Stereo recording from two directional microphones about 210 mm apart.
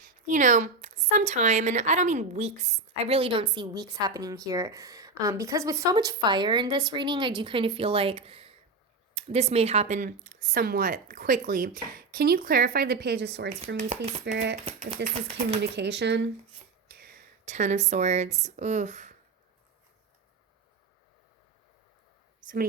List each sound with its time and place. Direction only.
0.3 s a woman's voice: 35° right (ahead or behind); by 13.5 s 55° right (ahead or behind)
13.9 s a woman's voice: 30° right (ahead or behind)
14.3 s speech: 60° right (ahead or behind)
14.6 s a woman's voice: 25° right (ahead or behind)
15.7 s speech: 55° right (ahead or behind)
16.9 s speech: 45° right (ahead or behind)